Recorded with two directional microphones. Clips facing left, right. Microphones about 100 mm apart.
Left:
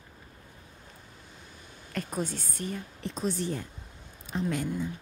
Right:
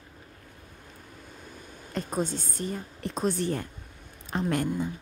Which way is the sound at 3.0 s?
55° right (ahead or behind).